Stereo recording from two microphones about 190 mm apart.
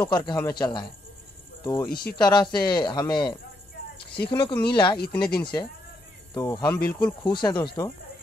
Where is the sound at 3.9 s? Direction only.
55° left (ahead or behind).